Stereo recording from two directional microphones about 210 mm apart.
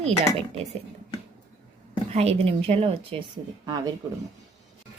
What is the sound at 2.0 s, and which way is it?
A woman's voice, 30° right (ahead or behind).